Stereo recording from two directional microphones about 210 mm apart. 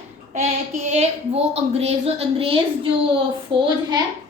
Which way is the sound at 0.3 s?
35° right (ahead or behind).